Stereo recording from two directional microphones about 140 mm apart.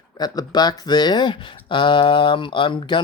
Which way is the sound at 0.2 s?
30° left (ahead or behind).